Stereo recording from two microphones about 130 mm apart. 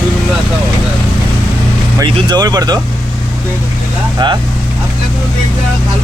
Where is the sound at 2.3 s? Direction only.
30° right (ahead or behind).